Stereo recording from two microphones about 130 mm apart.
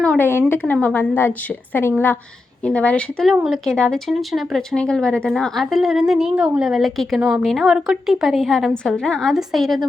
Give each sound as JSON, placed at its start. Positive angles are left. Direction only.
{"t": 0.0, "sound": "a sound", "side_deg": 5}
{"t": 0.3, "sound": "a woman's voice", "side_deg": 15}
{"t": 2.6, "sound": "a woman's voice", "side_deg": 10}